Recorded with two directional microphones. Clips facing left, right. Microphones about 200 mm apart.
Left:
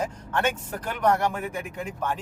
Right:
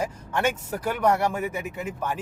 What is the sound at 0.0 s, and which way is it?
Speech, 10° right (ahead or behind).